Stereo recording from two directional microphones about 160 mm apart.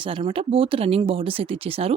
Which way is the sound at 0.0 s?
35° right (ahead or behind).